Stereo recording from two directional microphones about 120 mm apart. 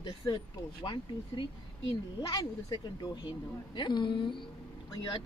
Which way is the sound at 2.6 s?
40° left (ahead or behind).